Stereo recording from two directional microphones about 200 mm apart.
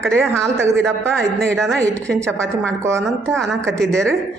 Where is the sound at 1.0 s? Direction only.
Centre (ahead or behind).